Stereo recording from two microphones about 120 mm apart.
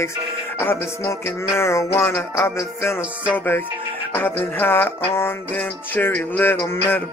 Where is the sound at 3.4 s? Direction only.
15° left (ahead or behind).